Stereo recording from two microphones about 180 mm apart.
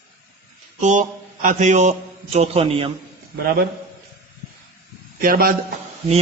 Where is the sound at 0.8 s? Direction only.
45° right (ahead or behind).